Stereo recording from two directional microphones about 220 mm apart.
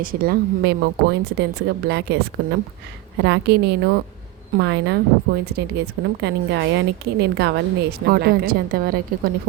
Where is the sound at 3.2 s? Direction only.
50° right (ahead or behind).